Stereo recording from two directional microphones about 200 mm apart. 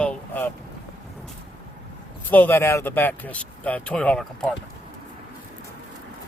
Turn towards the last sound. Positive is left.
turn(degrees=5)  # may be behind; listen again after turning